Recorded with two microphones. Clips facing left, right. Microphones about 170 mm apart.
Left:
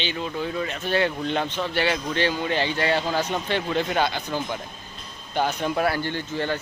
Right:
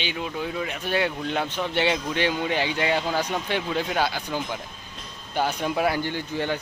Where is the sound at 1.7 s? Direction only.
20° right (ahead or behind).